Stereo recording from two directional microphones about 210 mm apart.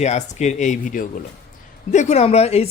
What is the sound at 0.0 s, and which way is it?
Speech, 35° left (ahead or behind).